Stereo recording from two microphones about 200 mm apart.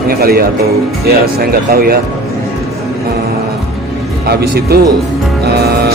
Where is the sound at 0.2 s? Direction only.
50° right (ahead or behind).